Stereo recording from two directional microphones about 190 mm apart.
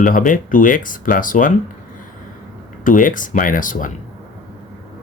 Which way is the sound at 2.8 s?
45° left (ahead or behind).